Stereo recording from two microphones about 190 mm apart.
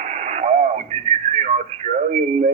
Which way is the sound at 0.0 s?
35° right (ahead or behind).